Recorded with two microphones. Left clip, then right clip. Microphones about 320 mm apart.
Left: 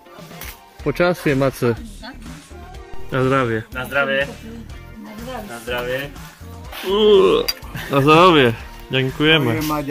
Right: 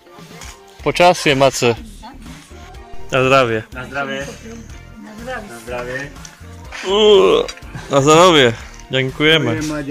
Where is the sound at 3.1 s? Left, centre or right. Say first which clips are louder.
Right 5 dB; centre.